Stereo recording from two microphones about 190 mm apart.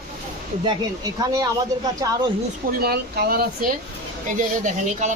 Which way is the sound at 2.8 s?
55° right (ahead or behind).